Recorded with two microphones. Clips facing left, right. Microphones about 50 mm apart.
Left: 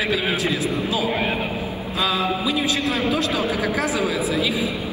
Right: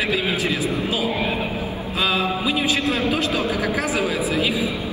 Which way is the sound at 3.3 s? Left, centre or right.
Left.